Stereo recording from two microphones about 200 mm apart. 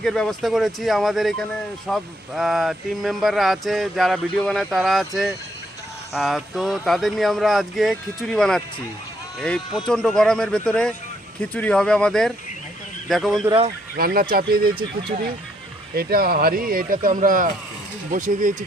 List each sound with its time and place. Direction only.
0.0 s speech: centre (ahead or behind)
9.8 s speech: 5° left (ahead or behind)
13.4 s speech: 25° right (ahead or behind)
13.9 s speech: 50° right (ahead or behind)